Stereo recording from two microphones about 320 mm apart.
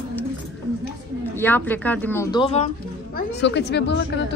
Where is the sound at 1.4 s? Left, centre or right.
Centre.